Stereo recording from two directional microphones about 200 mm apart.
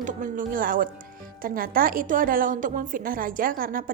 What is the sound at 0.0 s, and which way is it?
A woman's voice, 40° right (ahead or behind).